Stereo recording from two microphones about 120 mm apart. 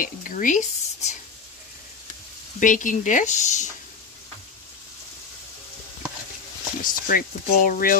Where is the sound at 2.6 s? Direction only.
90° left.